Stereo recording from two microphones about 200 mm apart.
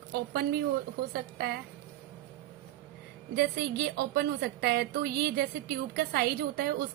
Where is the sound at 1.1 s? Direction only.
50° right (ahead or behind).